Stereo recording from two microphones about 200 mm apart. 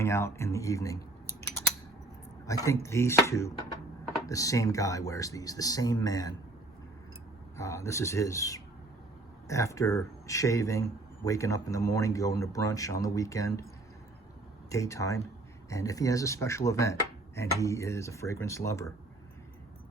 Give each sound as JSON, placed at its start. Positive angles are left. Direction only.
{"t": 0.0, "sound": "speech", "side_deg": 15}
{"t": 2.5, "sound": "speech", "side_deg": 15}
{"t": 7.5, "sound": "speech", "side_deg": 15}
{"t": 14.7, "sound": "speech", "side_deg": 15}